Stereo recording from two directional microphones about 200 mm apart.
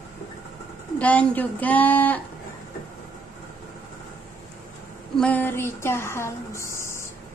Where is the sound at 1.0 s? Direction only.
5° left (ahead or behind).